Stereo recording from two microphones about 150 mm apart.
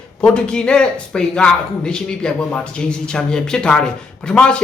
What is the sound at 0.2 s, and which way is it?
Speech, 5° left (ahead or behind).